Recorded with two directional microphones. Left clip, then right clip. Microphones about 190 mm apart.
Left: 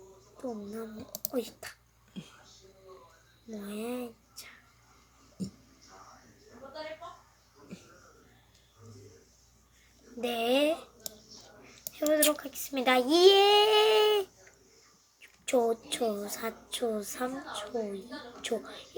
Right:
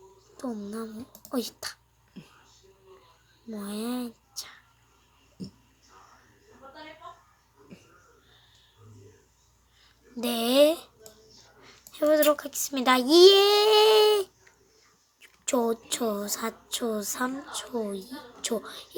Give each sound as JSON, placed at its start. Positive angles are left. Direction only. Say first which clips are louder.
{"t": 0.3, "sound": "a woman's voice", "louder": "right 3 dB", "side_deg": -40}
{"t": 3.7, "sound": "speech", "louder": "right 3 dB", "side_deg": -45}
{"t": 5.4, "sound": "a sound", "louder": "left 1 dB", "side_deg": 5}
{"t": 10.2, "sound": "a child's voice", "louder": "right 6 dB", "side_deg": -50}
{"t": 11.6, "sound": "a child's voice", "louder": "right 6 dB", "side_deg": -35}
{"t": 15.4, "sound": "a woman's voice", "louder": "right 1 dB", "side_deg": -40}